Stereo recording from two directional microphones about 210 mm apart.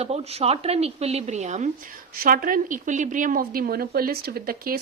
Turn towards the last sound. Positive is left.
turn(degrees=-45)  # may be behind; listen again after turning